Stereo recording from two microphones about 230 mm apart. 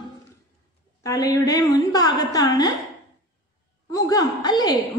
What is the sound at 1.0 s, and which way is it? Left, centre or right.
A woman's voice, centre.